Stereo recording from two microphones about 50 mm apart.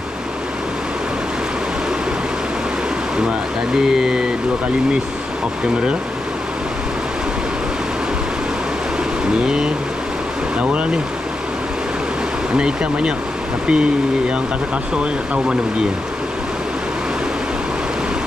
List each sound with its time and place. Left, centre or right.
3.8 s speech: centre
10.6 s a sound: right
12.5 s speech: centre